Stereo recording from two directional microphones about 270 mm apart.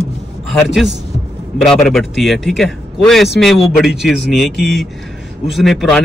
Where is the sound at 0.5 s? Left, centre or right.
Centre.